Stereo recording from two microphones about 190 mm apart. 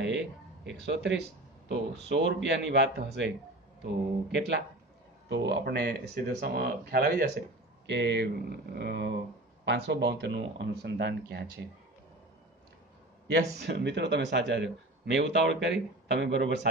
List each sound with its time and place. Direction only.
0.7 s speech: 65° right (ahead or behind)
13.6 s speech: 65° right (ahead or behind)